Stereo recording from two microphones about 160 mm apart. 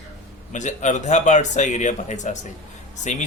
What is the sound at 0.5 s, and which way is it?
A man's voice, 50° left (ahead or behind).